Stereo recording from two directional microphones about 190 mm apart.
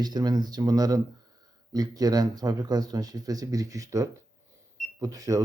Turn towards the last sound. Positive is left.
turn(degrees=-15)  # may be behind; listen again after turning